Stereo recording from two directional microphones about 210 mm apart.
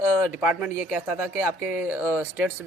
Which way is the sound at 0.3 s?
5° right (ahead or behind).